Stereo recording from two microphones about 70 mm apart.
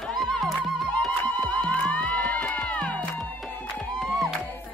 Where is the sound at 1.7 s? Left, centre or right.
Centre.